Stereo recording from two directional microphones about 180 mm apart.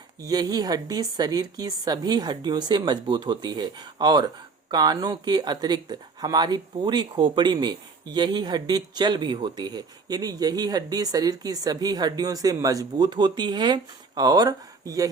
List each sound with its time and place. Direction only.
0.2 s speech: 20° right (ahead or behind)